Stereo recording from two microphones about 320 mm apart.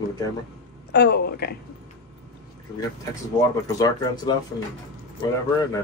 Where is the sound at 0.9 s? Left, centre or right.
Left.